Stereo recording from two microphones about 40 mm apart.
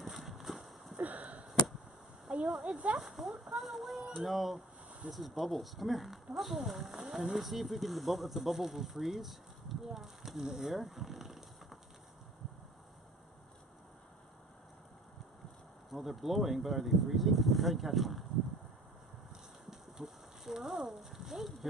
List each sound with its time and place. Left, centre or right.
0.0 s horse: centre
0.9 s sniff: right
2.3 s a sound: right
2.9 s speech: centre
5.0 s speech: right
5.4 s speech: centre
15.9 s speech: centre
19.7 s rain: centre